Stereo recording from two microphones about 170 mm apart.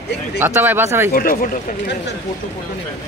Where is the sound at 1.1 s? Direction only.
60° left (ahead or behind).